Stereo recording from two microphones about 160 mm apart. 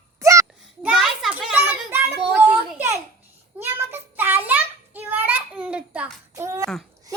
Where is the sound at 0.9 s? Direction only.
Centre (ahead or behind).